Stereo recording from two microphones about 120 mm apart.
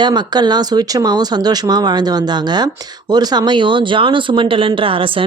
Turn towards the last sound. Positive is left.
turn(degrees=-45)  # may be behind; listen again after turning